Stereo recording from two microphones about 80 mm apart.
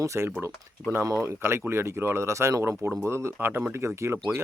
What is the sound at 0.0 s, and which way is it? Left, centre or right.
Speech, right.